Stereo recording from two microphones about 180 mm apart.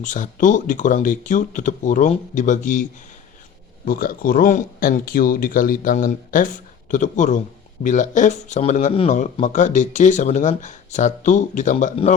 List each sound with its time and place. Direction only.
0.0 s speech: 45° left (ahead or behind)
3.8 s speech: 55° left (ahead or behind)